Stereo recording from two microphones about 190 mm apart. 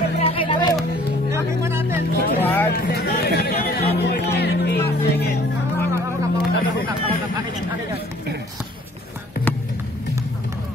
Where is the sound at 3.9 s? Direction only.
60° left (ahead or behind).